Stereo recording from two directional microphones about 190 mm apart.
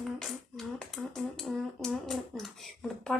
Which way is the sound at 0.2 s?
Centre (ahead or behind).